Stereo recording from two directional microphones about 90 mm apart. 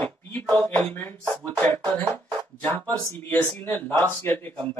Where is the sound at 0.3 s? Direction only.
20° left (ahead or behind).